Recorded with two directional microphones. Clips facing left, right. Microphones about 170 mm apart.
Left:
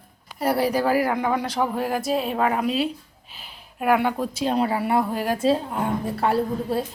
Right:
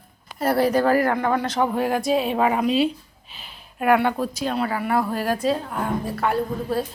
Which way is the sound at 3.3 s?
10° left (ahead or behind).